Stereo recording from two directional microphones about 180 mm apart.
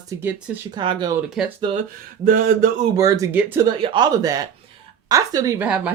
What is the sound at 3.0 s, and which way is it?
Speech, 20° right (ahead or behind).